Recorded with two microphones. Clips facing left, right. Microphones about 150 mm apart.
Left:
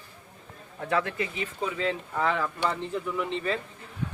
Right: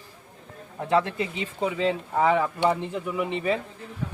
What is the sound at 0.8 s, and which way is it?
A man's voice, 25° right (ahead or behind).